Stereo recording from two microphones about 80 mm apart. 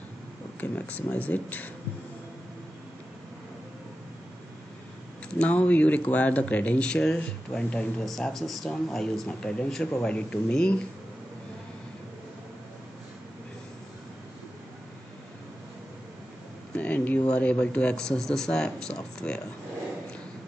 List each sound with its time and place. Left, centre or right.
0.6 s speech: centre
5.3 s speech: centre
16.7 s speech: centre